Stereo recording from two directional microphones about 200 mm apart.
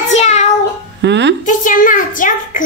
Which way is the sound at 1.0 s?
60° right (ahead or behind).